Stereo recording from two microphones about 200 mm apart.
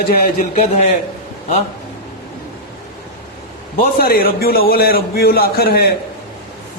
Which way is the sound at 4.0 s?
50° left (ahead or behind).